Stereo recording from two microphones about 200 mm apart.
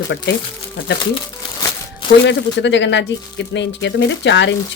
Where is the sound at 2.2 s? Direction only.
60° left (ahead or behind).